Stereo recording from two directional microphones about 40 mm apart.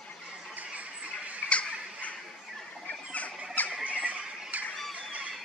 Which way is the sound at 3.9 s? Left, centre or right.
Right.